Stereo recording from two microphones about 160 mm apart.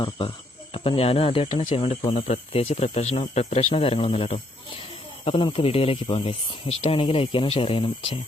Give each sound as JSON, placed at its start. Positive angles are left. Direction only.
{"t": 0.0, "sound": "speech", "side_deg": 35}